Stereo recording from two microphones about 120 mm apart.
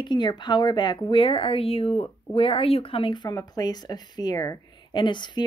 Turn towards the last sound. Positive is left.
turn(degrees=40)  # may be behind; listen again after turning